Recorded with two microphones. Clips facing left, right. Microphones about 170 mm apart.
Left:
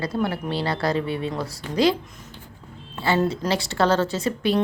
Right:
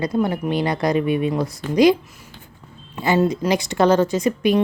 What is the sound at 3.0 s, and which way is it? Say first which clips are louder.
Speech: right 4 dB; 15° right (ahead or behind).